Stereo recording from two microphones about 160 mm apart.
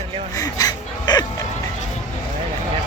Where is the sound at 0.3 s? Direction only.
20° left (ahead or behind).